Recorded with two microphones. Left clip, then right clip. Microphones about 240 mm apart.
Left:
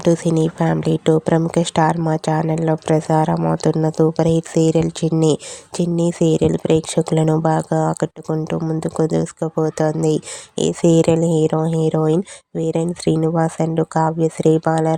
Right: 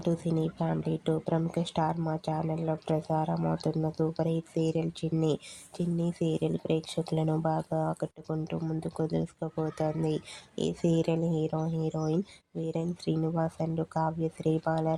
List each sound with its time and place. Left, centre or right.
0.0 s speech: left